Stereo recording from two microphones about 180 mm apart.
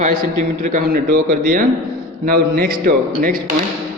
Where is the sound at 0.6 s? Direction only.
50° right (ahead or behind).